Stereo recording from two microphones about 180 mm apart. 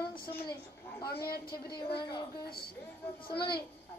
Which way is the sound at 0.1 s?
55° left (ahead or behind).